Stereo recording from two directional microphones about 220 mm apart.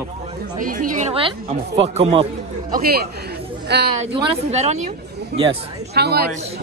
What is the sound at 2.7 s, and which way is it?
A woman's voice, 45° right (ahead or behind).